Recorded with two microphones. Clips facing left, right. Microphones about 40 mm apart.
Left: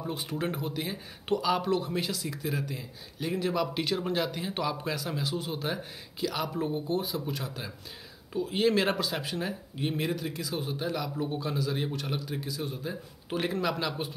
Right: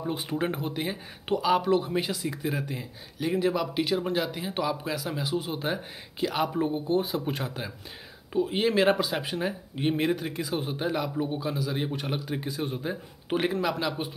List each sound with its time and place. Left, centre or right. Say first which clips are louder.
0.0 s speech: right 3 dB; centre
8.3 s speech: right 1 dB; right
11.1 s speech: right 2 dB; centre
11.9 s speech: right 3 dB; right
12.4 s a man's voice: right 4 dB; right
13.5 s speech: right 2 dB; centre